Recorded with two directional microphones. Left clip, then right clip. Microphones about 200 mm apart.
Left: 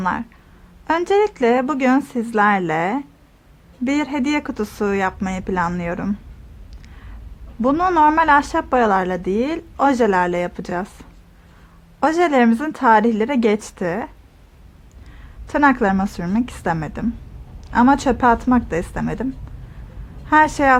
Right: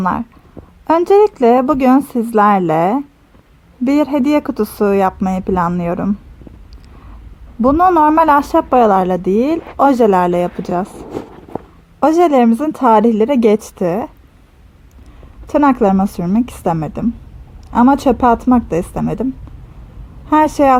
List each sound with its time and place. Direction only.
0.0 s a woman's voice: 40° right (ahead or behind)
7.6 s a woman's voice: 40° right (ahead or behind)
11.9 s a woman's voice: 40° right (ahead or behind)
15.4 s a woman's voice: 40° right (ahead or behind)